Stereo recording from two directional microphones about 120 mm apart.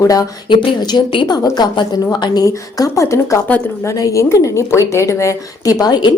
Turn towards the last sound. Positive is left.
turn(degrees=40)  # may be behind; listen again after turning